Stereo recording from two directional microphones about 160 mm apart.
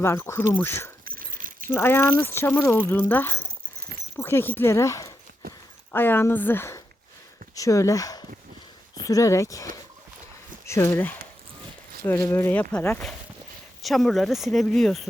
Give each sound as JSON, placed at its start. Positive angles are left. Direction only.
{"t": 0.0, "sound": "speech", "side_deg": 15}
{"t": 1.0, "sound": "dog", "side_deg": -60}
{"t": 1.7, "sound": "speech", "side_deg": 15}